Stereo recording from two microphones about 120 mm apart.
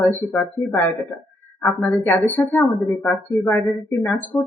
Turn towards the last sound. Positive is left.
turn(degrees=15)  # may be behind; listen again after turning